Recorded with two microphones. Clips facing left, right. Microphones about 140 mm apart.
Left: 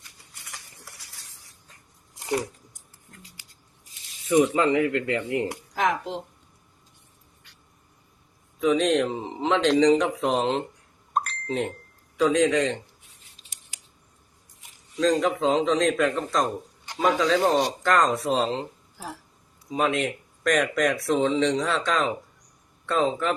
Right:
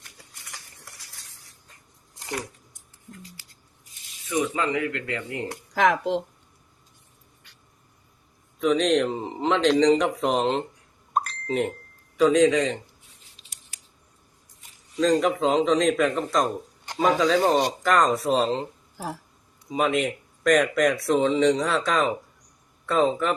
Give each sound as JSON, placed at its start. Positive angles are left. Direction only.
{"t": 0.3, "sound": "cutlery", "side_deg": 0}
{"t": 4.5, "sound": "speech", "side_deg": 30}
{"t": 5.7, "sound": "speech", "side_deg": -75}
{"t": 8.5, "sound": "speech", "side_deg": 5}
{"t": 11.1, "sound": "a sound", "side_deg": 0}
{"t": 12.1, "sound": "speech", "side_deg": 0}
{"t": 14.9, "sound": "speech", "side_deg": 0}
{"t": 19.6, "sound": "speech", "side_deg": 0}